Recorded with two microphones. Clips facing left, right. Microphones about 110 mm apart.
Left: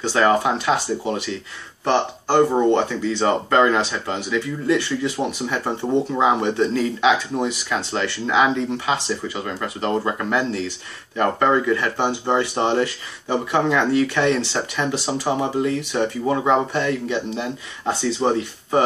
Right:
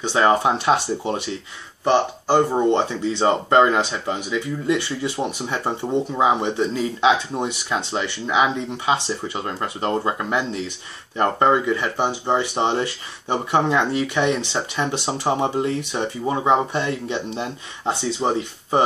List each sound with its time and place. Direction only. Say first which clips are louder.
0.0 s speech: even; 20° right (ahead or behind)
1.9 s speech: right 1 dB; 10° right (ahead or behind)
6.1 s speech: right 1 dB; 20° right (ahead or behind)